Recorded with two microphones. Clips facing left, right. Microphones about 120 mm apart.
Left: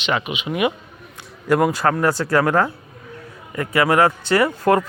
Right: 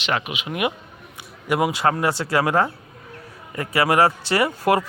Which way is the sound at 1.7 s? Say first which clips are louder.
Left 2 dB; 25° right (ahead or behind).